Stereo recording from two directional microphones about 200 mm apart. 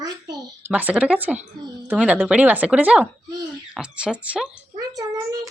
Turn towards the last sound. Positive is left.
turn(degrees=-20)  # may be behind; listen again after turning